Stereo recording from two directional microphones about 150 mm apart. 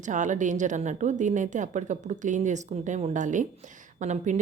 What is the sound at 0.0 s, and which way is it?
A woman's voice, 55° right (ahead or behind).